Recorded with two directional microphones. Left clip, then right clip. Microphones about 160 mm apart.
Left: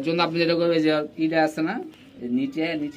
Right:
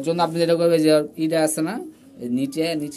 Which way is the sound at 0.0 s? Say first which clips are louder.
Right 2 dB; 50° right (ahead or behind).